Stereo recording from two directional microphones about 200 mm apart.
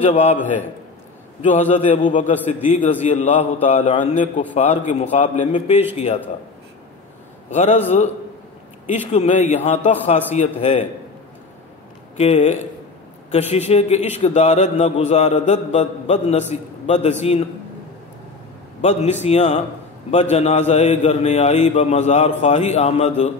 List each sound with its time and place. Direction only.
0.0 s a man's voice: 35° left (ahead or behind)
7.5 s a man's voice: 35° left (ahead or behind)
8.8 s a man's voice: 35° left (ahead or behind)
12.2 s a man's voice: 30° left (ahead or behind)
18.8 s a man's voice: 35° left (ahead or behind)